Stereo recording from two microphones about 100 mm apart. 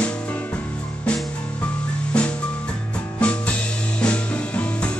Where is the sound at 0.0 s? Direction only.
15° left (ahead or behind).